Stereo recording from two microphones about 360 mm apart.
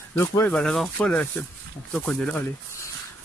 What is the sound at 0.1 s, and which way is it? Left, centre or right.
Speech, centre.